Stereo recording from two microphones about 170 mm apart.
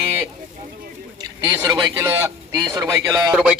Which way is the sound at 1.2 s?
20° right (ahead or behind).